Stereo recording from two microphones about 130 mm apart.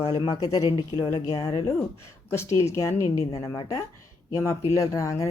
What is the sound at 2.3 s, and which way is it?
Speech, 20° left (ahead or behind).